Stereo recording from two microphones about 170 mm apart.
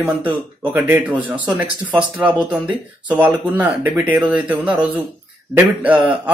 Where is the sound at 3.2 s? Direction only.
10° right (ahead or behind).